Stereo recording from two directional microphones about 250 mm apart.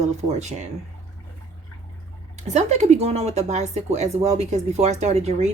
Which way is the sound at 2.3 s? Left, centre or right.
Right.